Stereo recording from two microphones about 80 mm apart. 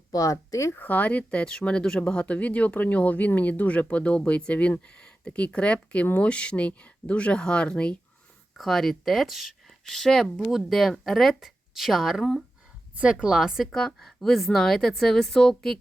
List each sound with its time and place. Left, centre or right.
0.1 s speech: left
0.7 s speech: left; by 12.4 s centre
13.0 s a woman's voice: centre